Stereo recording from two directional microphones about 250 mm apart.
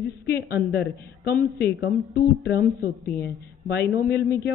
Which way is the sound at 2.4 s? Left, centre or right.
Left.